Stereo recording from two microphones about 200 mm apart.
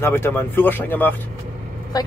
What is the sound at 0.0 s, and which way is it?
Speech, 10° left (ahead or behind).